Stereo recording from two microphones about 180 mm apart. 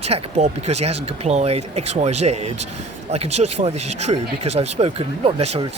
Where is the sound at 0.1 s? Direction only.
40° right (ahead or behind).